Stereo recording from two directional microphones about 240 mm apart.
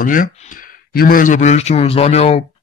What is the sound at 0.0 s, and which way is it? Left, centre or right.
Speech, left.